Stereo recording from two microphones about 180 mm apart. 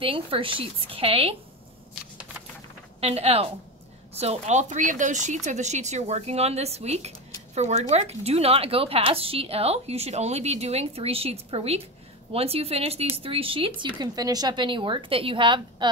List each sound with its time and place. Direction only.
0.0 s a woman's voice: 30° right (ahead or behind)
3.0 s a woman's voice: 35° right (ahead or behind)